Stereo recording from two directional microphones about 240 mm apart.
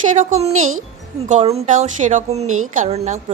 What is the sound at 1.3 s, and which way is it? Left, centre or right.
A woman's voice, right.